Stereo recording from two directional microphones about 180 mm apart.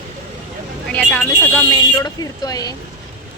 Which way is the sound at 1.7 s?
20° left (ahead or behind).